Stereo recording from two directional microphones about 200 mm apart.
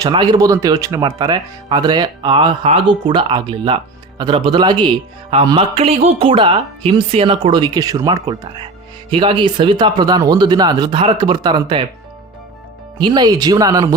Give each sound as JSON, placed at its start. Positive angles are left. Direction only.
{"t": 0.0, "sound": "speech", "side_deg": -20}
{"t": 13.0, "sound": "speech", "side_deg": -20}